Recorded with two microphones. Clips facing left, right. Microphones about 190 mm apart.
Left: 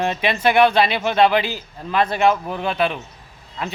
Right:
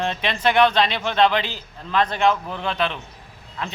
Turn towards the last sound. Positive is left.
turn(degrees=10)  # may be behind; listen again after turning